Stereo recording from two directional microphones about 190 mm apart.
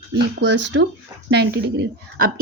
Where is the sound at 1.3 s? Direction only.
60° right (ahead or behind).